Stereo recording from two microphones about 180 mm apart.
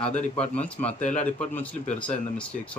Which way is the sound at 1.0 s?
45° left (ahead or behind).